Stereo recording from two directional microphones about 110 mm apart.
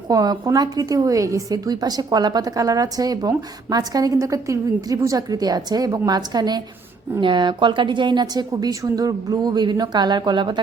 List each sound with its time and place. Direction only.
0.1 s a woman's voice: 35° right (ahead or behind)